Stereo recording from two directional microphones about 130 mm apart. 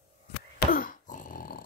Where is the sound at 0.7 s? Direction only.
90° left.